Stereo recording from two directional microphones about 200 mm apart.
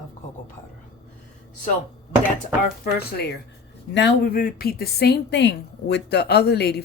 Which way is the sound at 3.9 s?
50° left (ahead or behind).